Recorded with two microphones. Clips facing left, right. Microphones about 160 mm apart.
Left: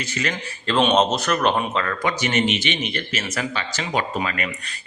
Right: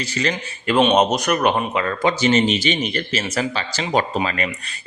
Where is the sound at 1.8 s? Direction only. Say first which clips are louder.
Right 5 dB; 25° right (ahead or behind).